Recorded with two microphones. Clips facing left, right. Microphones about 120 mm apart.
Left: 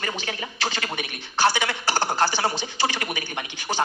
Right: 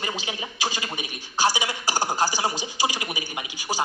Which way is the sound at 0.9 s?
55° left (ahead or behind).